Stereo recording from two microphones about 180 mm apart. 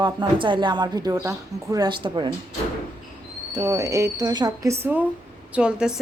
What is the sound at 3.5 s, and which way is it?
A woman's voice, 20° right (ahead or behind).